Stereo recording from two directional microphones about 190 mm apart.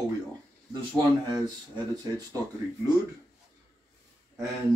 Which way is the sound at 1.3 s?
20° right (ahead or behind).